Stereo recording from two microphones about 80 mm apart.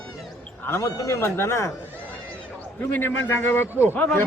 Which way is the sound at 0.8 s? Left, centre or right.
Left.